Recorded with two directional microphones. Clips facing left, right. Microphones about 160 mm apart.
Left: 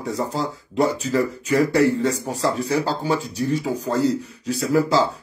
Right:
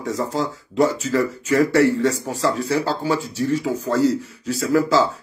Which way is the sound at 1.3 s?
15° left (ahead or behind).